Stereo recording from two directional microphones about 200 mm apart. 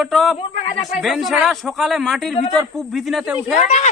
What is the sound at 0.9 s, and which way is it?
Speech, centre (ahead or behind).